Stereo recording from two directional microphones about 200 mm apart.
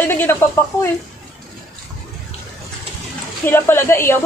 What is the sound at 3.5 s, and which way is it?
Speech, 10° left (ahead or behind).